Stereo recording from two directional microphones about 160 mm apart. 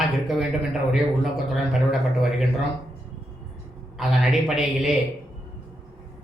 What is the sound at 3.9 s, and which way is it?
Speech, centre (ahead or behind).